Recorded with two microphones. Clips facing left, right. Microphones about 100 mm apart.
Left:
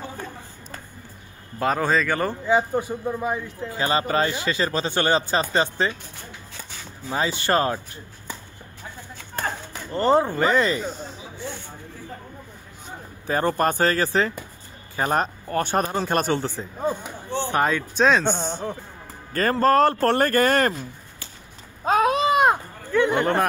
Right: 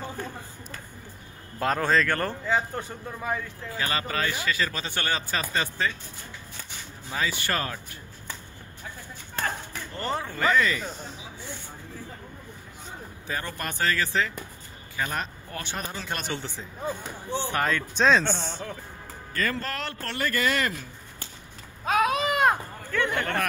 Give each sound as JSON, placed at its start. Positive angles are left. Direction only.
{"t": 1.6, "sound": "speech", "side_deg": 5}
{"t": 7.1, "sound": "speech", "side_deg": 30}
{"t": 9.9, "sound": "speech", "side_deg": 35}
{"t": 13.3, "sound": "speech", "side_deg": 40}
{"t": 17.4, "sound": "speech", "side_deg": 20}
{"t": 17.9, "sound": "a man's voice", "side_deg": 5}
{"t": 18.3, "sound": "speech", "side_deg": 30}
{"t": 19.3, "sound": "speech", "side_deg": 40}
{"t": 21.8, "sound": "a sound", "side_deg": 35}